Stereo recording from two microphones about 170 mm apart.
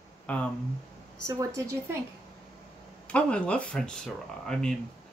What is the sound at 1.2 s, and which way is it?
Speech, 20° right (ahead or behind).